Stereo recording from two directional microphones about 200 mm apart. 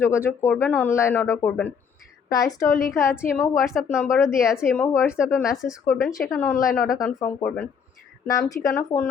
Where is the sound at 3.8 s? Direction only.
5° right (ahead or behind).